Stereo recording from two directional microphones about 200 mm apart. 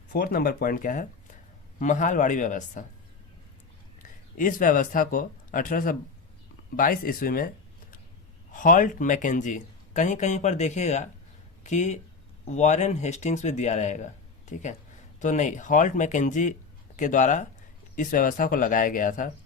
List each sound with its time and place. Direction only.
0.1 s speech: 50° left (ahead or behind)
4.4 s speech: 40° left (ahead or behind)